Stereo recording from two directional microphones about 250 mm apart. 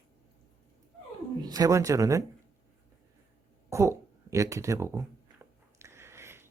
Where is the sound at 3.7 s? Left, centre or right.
Centre.